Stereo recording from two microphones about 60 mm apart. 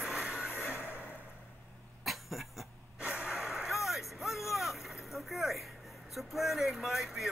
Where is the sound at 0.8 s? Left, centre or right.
Left.